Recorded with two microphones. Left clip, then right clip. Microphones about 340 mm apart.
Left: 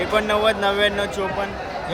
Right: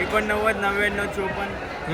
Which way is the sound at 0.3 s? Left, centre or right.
Centre.